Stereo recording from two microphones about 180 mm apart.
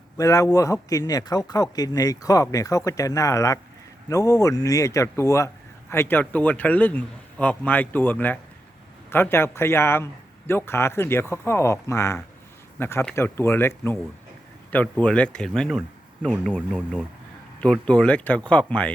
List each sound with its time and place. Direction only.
0.2 s a man's voice: 20° left (ahead or behind)